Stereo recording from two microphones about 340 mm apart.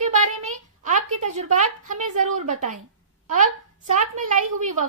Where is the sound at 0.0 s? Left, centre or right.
Right.